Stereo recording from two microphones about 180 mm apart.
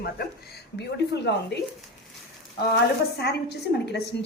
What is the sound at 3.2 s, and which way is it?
Speech, 65° left (ahead or behind).